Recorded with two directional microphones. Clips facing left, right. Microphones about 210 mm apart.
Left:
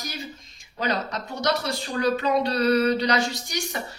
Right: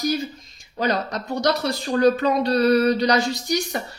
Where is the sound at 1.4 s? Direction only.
40° right (ahead or behind).